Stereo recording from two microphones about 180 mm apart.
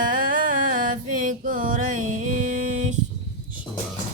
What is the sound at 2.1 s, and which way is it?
Music, 45° right (ahead or behind).